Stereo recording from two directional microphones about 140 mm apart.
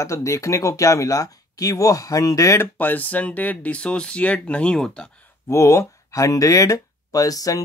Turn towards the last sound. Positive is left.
turn(degrees=25)  # may be behind; listen again after turning